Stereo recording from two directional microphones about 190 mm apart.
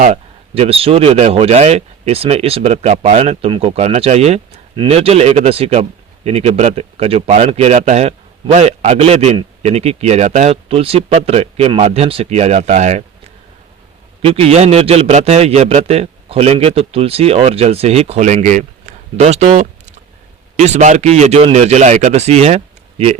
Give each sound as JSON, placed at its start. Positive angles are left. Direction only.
{"t": 0.0, "sound": "a man's voice", "side_deg": -35}
{"t": 14.2, "sound": "a man's voice", "side_deg": -30}